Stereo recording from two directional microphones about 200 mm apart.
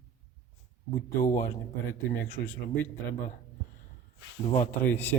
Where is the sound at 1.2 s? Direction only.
15° left (ahead or behind).